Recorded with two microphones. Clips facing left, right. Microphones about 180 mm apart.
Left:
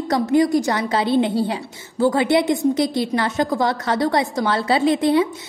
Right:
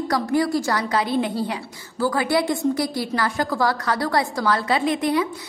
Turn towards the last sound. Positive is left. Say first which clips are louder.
# left 5 dB
turn(degrees=25)  # may be behind; listen again after turning